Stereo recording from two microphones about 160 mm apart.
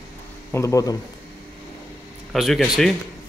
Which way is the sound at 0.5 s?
20° left (ahead or behind).